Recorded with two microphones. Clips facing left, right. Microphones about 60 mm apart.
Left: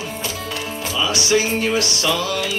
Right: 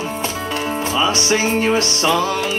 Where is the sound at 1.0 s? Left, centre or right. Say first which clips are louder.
Left 1 dB; right.